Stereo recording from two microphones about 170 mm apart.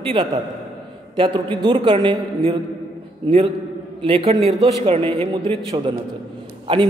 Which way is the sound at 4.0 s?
30° right (ahead or behind).